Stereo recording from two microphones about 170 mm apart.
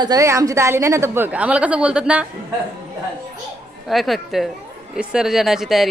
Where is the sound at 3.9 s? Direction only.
Centre (ahead or behind).